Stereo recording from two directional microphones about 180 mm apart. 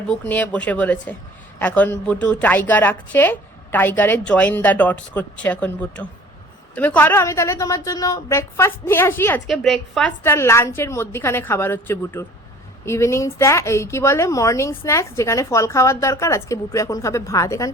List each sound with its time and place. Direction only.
0.1 s speech: 10° left (ahead or behind)
9.5 s a woman's voice: centre (ahead or behind)
10.2 s speech: 15° left (ahead or behind)